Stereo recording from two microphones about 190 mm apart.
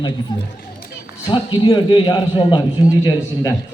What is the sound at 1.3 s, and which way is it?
A man's voice, 25° left (ahead or behind).